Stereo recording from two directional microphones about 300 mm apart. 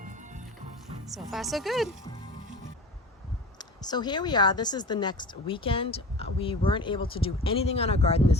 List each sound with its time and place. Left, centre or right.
1.0 s a woman's voice: centre
3.6 s speech: centre